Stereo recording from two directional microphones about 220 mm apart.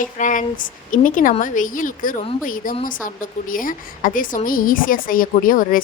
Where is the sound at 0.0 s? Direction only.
35° left (ahead or behind).